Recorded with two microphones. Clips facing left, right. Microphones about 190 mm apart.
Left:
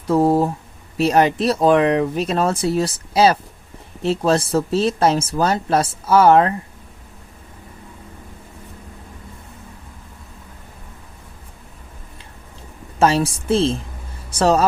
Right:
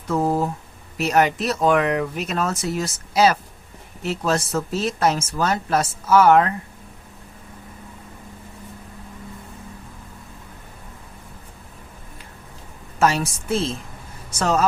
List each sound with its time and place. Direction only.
0.1 s speech: 30° left (ahead or behind)
13.0 s a woman's voice: 30° left (ahead or behind)